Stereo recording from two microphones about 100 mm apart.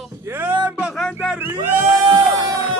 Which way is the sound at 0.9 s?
5° left (ahead or behind).